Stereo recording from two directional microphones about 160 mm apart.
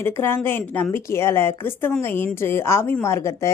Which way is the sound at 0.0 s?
15° left (ahead or behind).